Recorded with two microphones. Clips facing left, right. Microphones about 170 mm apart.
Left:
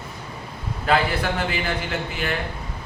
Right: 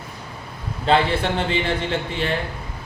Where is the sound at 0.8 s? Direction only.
25° right (ahead or behind).